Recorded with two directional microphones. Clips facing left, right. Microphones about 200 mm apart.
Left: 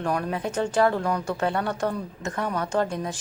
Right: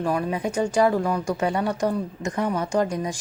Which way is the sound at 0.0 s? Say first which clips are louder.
Right 2 dB; 5° right (ahead or behind).